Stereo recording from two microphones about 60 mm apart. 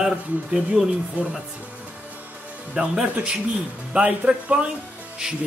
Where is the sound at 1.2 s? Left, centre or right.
Right.